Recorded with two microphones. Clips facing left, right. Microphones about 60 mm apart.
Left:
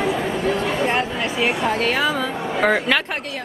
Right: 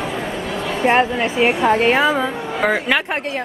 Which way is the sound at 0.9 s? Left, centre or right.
Right.